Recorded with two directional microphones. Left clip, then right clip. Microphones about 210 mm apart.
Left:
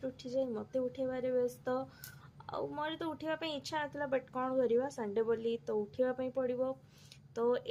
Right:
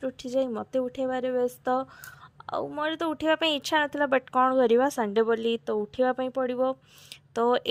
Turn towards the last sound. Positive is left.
turn(degrees=-45)  # may be behind; listen again after turning